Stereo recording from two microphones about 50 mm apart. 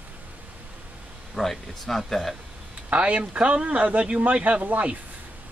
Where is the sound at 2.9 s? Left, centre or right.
Right.